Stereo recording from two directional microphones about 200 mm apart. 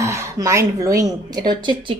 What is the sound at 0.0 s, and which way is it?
Speech, 15° right (ahead or behind).